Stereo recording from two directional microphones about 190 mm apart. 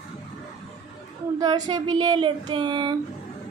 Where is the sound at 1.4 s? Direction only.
20° right (ahead or behind).